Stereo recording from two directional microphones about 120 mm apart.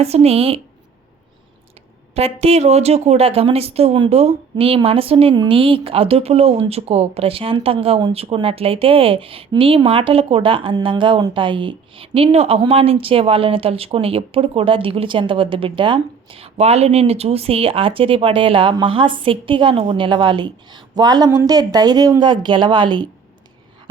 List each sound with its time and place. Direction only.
0.0 s speech: 60° right (ahead or behind)
2.1 s speech: 60° right (ahead or behind); by 23.0 s 40° right (ahead or behind)